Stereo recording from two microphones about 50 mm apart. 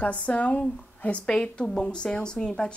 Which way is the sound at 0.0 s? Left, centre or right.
Left.